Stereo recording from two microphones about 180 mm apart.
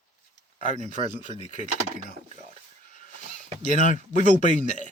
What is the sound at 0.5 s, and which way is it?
Speech, 45° left (ahead or behind).